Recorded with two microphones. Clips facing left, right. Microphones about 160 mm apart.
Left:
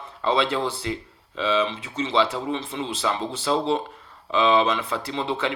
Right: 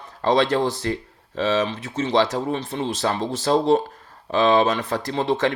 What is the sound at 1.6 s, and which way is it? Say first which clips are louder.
Speech: right 2 dB; 40° right (ahead or behind).